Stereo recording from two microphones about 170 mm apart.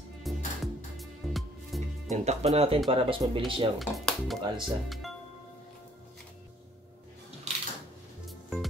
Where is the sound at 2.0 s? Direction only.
40° right (ahead or behind).